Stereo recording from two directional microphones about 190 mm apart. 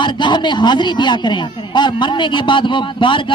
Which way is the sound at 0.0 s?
25° left (ahead or behind).